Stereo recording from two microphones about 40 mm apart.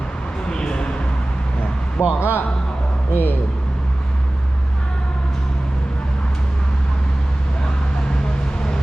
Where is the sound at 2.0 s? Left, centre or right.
Left.